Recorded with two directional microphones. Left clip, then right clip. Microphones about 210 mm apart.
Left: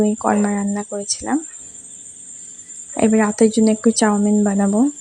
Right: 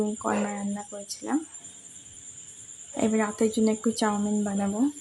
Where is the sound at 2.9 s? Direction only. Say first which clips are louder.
Left 10 dB; 35° left (ahead or behind).